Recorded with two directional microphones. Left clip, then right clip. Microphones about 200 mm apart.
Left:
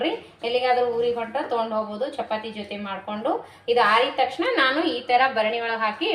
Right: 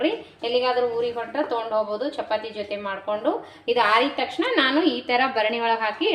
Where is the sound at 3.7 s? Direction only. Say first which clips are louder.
Left 1 dB; 45° right (ahead or behind).